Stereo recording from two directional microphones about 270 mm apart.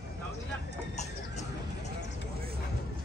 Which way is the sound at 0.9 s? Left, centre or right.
Left.